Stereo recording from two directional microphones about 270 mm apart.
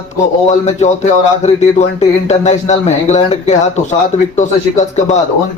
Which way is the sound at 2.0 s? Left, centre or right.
Left.